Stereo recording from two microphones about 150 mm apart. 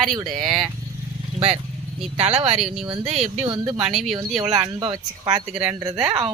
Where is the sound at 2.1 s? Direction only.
45° right (ahead or behind).